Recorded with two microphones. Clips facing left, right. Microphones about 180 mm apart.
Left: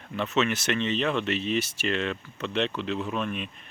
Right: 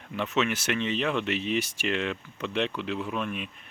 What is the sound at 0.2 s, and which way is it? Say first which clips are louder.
Speech: left 1 dB; 10° right (ahead or behind).